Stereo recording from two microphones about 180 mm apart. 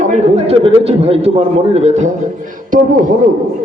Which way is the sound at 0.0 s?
40° right (ahead or behind).